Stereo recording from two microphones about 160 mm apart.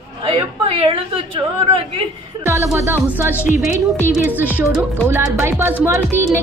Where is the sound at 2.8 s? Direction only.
15° right (ahead or behind).